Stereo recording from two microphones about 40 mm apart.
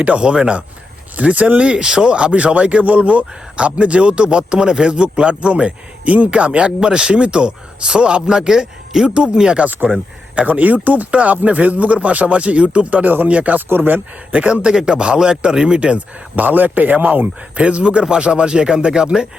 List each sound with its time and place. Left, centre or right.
0.0 s speech: right
1.6 s speech: right
10.3 s speech: right
13.1 s speech: right
13.3 s speech: right
13.7 s speech: right
14.3 s speech: right
16.3 s speech: right